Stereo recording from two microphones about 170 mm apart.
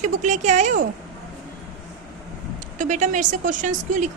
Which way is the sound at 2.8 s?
45° right (ahead or behind).